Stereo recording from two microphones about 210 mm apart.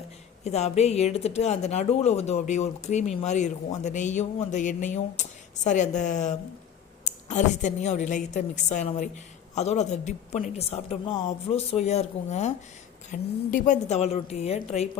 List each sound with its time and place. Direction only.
0.4 s speech: 30° left (ahead or behind)